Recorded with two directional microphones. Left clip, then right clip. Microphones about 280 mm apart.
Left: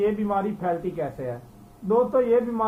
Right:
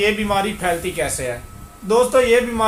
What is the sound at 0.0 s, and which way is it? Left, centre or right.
Speech, right.